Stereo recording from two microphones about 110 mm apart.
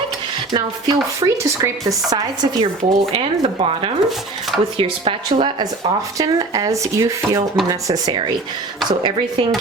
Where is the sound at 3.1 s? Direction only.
65° right (ahead or behind).